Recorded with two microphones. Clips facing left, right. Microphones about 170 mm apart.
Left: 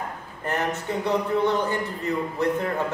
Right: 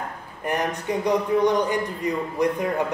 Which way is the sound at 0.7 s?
15° right (ahead or behind).